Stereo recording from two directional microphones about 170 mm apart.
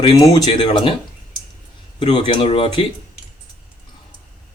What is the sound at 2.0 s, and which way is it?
Speech, 35° left (ahead or behind).